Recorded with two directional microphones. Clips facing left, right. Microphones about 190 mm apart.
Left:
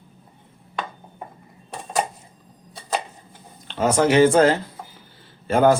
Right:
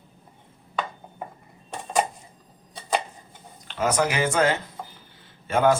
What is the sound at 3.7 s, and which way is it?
Speech, 30° left (ahead or behind).